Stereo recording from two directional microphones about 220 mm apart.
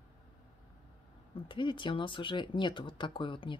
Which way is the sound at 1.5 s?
20° left (ahead or behind).